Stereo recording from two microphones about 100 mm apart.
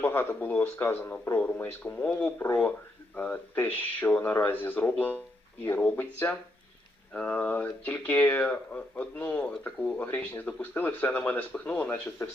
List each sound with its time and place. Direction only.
0.0 s speech: 20° left (ahead or behind)